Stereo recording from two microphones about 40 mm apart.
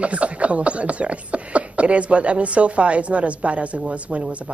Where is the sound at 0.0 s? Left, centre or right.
Right.